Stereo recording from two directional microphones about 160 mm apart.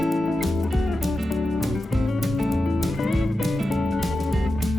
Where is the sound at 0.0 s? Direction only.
Centre (ahead or behind).